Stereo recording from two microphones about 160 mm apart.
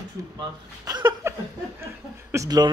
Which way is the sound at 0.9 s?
25° right (ahead or behind).